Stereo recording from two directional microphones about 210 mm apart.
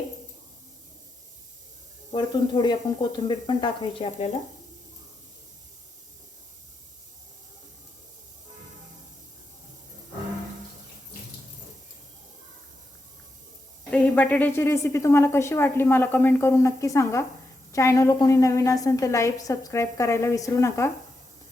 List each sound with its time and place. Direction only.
2.1 s speech: 20° left (ahead or behind)
13.9 s a woman's voice: 5° left (ahead or behind)